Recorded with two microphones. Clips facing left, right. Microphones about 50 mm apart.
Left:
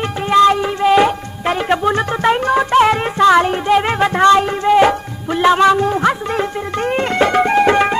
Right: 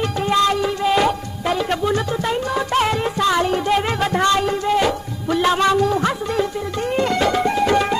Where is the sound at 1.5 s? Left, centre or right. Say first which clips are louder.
Left 4 dB; left.